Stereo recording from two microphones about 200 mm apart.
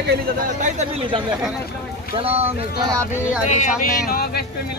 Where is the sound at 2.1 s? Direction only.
30° right (ahead or behind).